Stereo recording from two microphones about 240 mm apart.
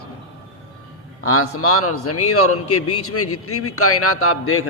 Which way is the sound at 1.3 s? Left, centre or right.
Left.